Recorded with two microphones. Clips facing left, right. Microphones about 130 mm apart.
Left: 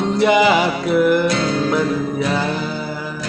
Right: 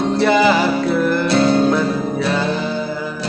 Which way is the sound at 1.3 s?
30° right (ahead or behind).